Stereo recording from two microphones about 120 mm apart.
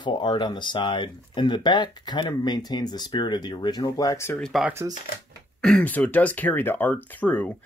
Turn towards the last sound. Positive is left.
turn(degrees=15)  # may be behind; listen again after turning